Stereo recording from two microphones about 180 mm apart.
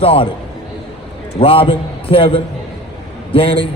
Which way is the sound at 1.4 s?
30° left (ahead or behind).